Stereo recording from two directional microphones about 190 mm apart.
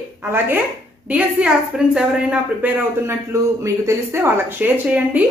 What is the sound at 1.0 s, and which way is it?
A woman's voice, 5° right (ahead or behind).